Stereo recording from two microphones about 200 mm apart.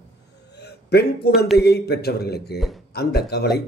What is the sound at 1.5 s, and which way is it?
A man's voice, 55° left (ahead or behind).